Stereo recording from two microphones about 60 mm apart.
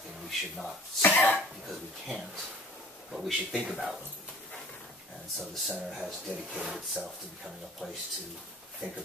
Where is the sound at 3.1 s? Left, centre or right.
Centre.